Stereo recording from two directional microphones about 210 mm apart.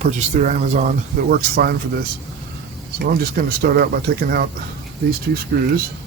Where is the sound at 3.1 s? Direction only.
45° right (ahead or behind).